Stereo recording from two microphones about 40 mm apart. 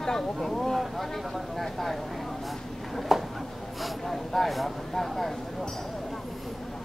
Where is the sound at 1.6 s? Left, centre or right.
Centre.